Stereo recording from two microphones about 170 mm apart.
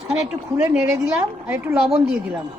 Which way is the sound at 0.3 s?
15° right (ahead or behind).